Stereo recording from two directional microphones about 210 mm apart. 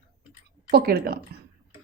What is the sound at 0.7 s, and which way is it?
Speech, 45° right (ahead or behind).